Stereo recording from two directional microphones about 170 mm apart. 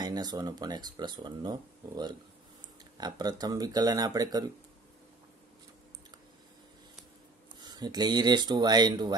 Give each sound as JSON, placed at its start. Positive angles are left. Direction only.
{"t": 0.0, "sound": "speech", "side_deg": -25}
{"t": 7.6, "sound": "speech", "side_deg": -25}